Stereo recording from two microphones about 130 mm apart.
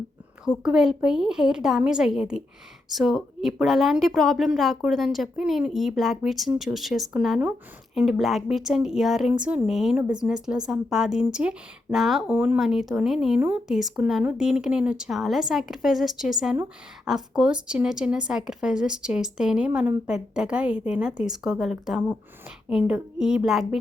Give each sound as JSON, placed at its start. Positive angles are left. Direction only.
{"t": 0.6, "sound": "a woman's voice", "side_deg": -5}
{"t": 12.3, "sound": "speech", "side_deg": -15}
{"t": 12.5, "sound": "a woman's voice", "side_deg": 0}